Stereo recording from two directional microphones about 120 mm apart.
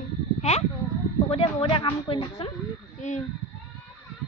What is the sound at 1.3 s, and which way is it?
A woman's voice, 45° left (ahead or behind).